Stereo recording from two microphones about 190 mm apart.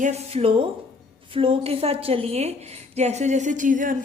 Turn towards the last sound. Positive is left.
turn(degrees=-45)  # may be behind; listen again after turning